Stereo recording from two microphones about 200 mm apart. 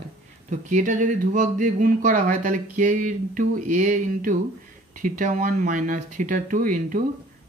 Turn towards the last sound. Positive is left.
turn(degrees=-40)  # may be behind; listen again after turning